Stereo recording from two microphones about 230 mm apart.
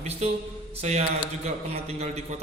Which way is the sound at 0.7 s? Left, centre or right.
Right.